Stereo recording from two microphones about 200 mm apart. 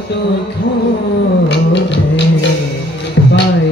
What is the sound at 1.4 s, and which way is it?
Music, 60° left (ahead or behind).